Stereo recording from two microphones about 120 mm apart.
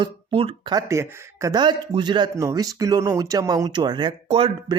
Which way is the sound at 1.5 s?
35° right (ahead or behind).